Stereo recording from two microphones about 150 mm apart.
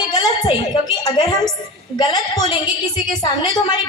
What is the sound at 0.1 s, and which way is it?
A woman's voice, 30° left (ahead or behind).